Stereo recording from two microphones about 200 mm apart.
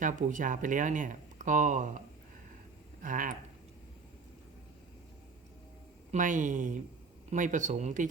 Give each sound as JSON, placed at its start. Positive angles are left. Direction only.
{"t": 0.0, "sound": "speech", "side_deg": -40}
{"t": 3.0, "sound": "speech", "side_deg": -40}
{"t": 6.1, "sound": "speech", "side_deg": -40}